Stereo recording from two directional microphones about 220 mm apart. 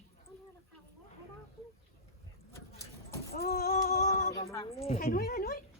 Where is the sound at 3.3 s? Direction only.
45° left (ahead or behind).